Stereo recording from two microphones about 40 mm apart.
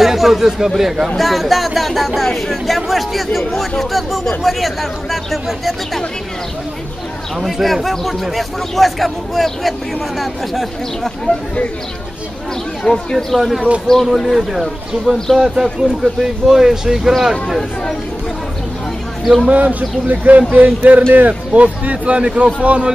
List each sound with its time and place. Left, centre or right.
0.0 s speech: centre
7.3 s speech: centre
11.3 s speech: left
12.8 s speech: centre
14.2 s speech: centre
15.3 s speech: centre
19.2 s speech: centre
19.5 s speech: right
21.5 s speech: right